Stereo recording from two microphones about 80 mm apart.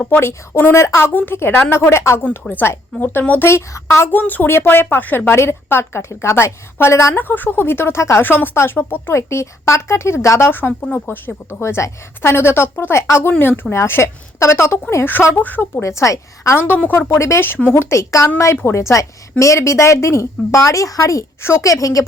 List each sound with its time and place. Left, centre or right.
0.2 s a woman's voice: left
2.5 s a woman's voice: left
3.5 s a woman's voice: left
4.2 s a woman's voice: left
7.3 s a woman's voice: left
9.1 s a woman's voice: left
15.8 s a woman's voice: left
16.6 s a woman's voice: left
17.1 s a woman's voice: left